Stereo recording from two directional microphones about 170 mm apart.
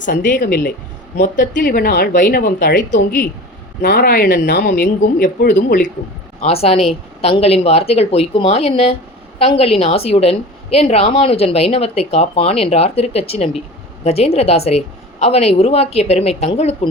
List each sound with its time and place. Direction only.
0.3 s speech: 60° left (ahead or behind)
6.4 s a woman's voice: 35° left (ahead or behind)